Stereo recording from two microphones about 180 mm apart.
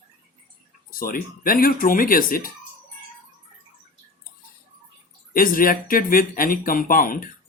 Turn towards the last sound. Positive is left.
turn(degrees=50)  # may be behind; listen again after turning